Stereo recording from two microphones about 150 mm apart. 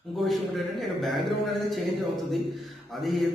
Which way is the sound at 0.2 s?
Centre (ahead or behind).